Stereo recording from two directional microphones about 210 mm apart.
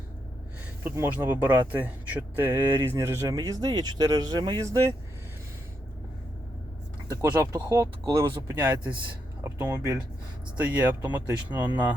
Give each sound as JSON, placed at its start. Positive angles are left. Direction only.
{"t": 0.9, "sound": "speech", "side_deg": -10}
{"t": 7.1, "sound": "speech", "side_deg": -15}
{"t": 10.6, "sound": "speech", "side_deg": -5}